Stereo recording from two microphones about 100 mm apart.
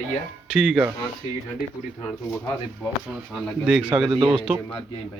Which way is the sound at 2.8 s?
5° right (ahead or behind).